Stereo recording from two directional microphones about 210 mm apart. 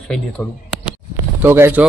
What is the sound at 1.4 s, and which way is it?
Speech, 10° right (ahead or behind).